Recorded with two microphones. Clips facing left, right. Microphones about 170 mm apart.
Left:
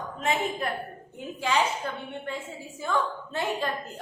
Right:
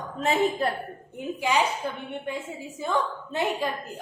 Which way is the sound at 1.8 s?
15° right (ahead or behind).